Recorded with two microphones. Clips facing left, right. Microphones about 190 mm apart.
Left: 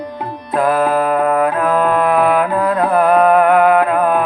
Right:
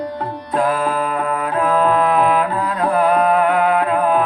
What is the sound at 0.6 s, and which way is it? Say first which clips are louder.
Music: left 4 dB; 55° left (ahead or behind).